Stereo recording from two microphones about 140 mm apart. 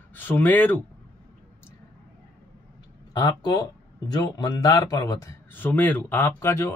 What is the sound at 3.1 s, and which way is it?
Speech, 25° left (ahead or behind).